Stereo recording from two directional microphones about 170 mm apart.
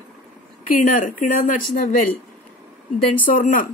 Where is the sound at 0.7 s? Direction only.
50° left (ahead or behind).